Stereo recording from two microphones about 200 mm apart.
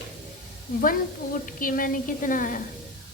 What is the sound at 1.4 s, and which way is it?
A woman's voice, 45° left (ahead or behind).